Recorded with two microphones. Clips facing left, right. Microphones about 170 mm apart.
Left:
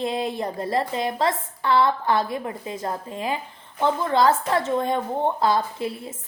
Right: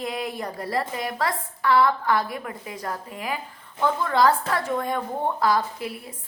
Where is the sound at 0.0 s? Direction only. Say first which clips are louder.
Left 4 dB; 25° left (ahead or behind).